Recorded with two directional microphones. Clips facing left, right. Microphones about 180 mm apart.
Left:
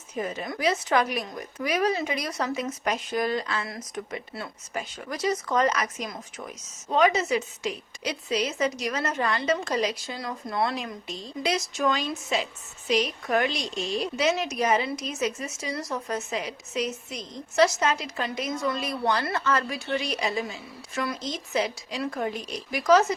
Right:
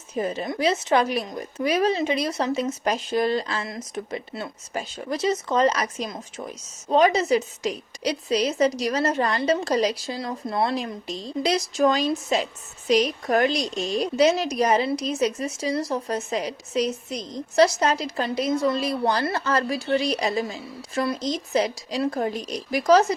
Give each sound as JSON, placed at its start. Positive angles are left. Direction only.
{"t": 0.1, "sound": "a woman's voice", "side_deg": -30}